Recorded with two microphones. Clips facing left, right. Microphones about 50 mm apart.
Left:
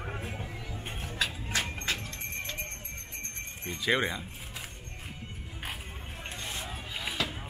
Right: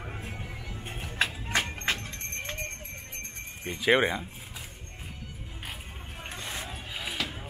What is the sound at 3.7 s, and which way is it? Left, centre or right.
Speech, centre.